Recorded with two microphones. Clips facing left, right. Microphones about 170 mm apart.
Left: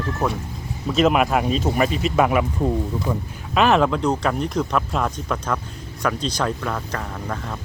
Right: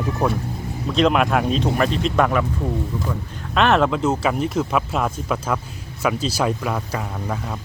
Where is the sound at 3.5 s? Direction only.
Centre (ahead or behind).